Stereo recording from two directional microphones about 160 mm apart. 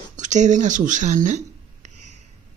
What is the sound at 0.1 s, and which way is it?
Speech, 50° right (ahead or behind).